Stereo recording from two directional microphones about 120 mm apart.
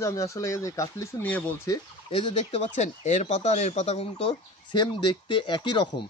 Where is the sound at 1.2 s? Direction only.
10° left (ahead or behind).